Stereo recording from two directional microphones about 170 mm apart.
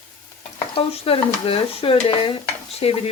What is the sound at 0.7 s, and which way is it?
Speech, 35° left (ahead or behind).